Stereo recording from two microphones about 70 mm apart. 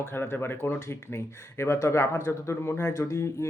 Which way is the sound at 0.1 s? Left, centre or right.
Left.